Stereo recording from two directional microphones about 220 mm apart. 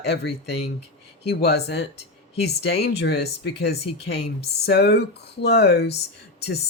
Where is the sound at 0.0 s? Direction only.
50° left (ahead or behind).